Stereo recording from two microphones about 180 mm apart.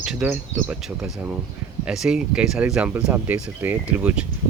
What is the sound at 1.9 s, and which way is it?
Speech, 5° right (ahead or behind).